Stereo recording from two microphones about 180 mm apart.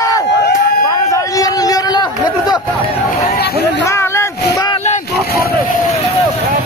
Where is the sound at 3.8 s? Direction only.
15° left (ahead or behind).